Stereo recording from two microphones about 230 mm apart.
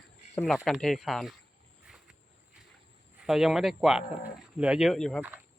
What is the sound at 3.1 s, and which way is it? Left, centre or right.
Speech, centre.